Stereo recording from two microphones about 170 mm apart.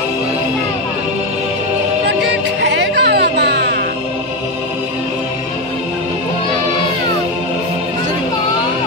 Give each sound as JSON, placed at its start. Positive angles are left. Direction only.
{"t": 2.6, "sound": "music", "side_deg": -90}